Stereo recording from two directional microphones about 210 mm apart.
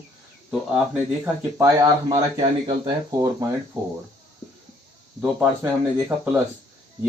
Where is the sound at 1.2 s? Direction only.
15° right (ahead or behind).